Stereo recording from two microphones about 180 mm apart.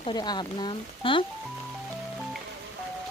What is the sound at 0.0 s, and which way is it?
Speech, 25° left (ahead or behind).